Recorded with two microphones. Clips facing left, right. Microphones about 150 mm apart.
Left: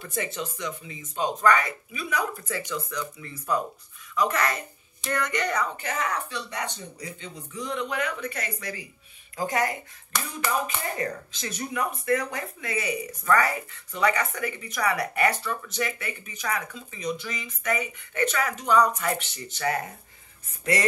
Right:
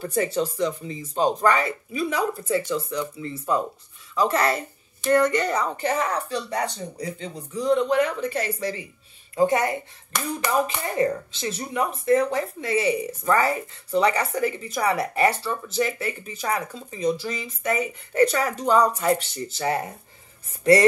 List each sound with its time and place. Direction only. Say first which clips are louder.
0.0 s a woman's voice: right 8 dB; 35° right (ahead or behind)
11.0 s a woman's voice: right 8 dB; 25° right (ahead or behind)